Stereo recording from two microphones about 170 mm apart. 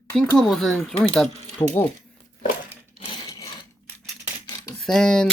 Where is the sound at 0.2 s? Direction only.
5° left (ahead or behind).